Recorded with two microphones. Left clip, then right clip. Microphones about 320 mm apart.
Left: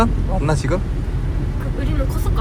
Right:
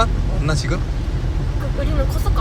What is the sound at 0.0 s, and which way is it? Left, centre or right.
Vehicle, centre.